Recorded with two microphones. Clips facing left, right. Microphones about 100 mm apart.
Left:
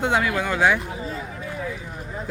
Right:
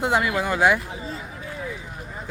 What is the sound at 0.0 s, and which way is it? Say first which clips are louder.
Speech: even; 5° right (ahead or behind).